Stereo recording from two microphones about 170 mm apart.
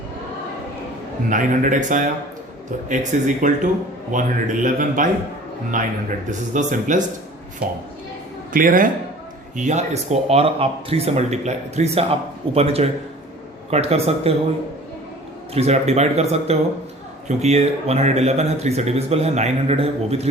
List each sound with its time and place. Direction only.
1.3 s speech: 50° right (ahead or behind)
8.5 s speech: 55° right (ahead or behind)
9.6 s speech: 45° right (ahead or behind)
15.5 s speech: 40° right (ahead or behind)